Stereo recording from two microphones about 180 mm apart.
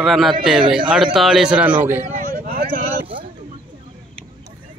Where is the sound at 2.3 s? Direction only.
55° right (ahead or behind).